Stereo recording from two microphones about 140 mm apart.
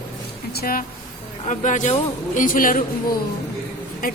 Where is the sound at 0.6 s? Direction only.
90° left.